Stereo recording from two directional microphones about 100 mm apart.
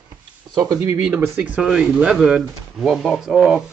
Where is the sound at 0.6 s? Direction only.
35° right (ahead or behind).